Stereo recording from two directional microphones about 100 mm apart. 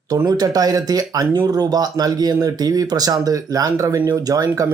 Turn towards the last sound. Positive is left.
turn(degrees=-35)  # may be behind; listen again after turning